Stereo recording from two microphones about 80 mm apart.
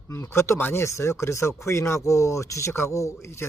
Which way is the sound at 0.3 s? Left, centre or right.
Left.